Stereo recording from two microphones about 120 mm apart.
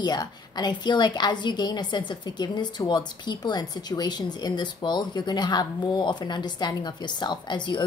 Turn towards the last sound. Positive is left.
turn(degrees=40)  # may be behind; listen again after turning